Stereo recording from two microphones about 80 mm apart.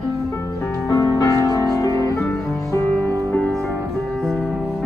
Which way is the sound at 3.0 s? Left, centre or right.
Centre.